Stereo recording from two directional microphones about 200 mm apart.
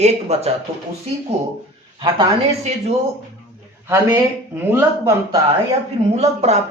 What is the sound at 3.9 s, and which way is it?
Speech, 15° right (ahead or behind).